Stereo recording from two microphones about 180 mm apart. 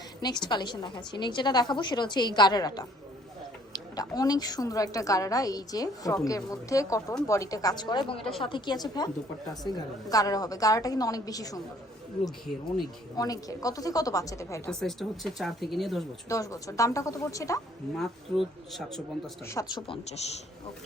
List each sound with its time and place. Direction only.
0.2 s a woman's voice: 25° left (ahead or behind)
13.1 s a woman's voice: 20° left (ahead or behind)
14.7 s speech: centre (ahead or behind)
16.3 s speech: 20° left (ahead or behind)
17.9 s speech: centre (ahead or behind)
19.5 s speech: 20° left (ahead or behind)